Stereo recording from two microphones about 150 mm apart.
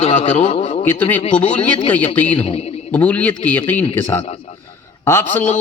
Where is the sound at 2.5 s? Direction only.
40° left (ahead or behind).